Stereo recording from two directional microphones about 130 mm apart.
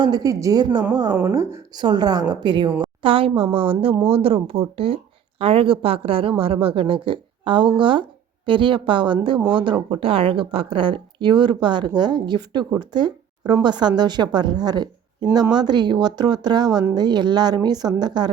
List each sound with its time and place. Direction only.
0.0 s a woman's voice: 30° right (ahead or behind)